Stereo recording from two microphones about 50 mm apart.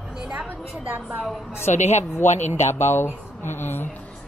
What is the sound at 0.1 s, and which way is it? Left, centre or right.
Speech, centre.